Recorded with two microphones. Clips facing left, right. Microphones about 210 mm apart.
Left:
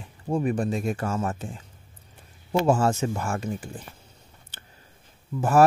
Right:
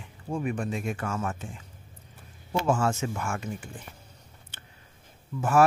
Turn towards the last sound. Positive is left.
turn(degrees=40)  # may be behind; listen again after turning